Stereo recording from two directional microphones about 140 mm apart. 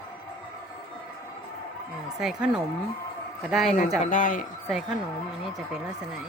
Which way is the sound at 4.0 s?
65° left (ahead or behind).